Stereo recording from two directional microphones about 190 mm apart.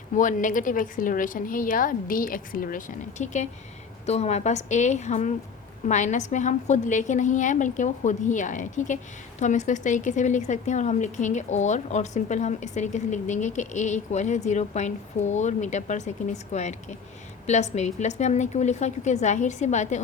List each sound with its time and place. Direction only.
0.2 s a woman's voice: 40° left (ahead or behind)